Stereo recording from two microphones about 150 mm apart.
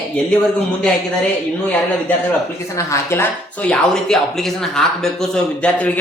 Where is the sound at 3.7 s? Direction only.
5° left (ahead or behind).